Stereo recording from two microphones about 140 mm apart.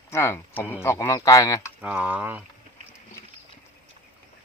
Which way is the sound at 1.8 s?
10° right (ahead or behind).